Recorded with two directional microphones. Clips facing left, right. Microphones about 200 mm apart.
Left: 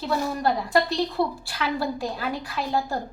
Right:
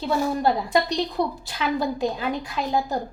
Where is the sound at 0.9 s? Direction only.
20° right (ahead or behind).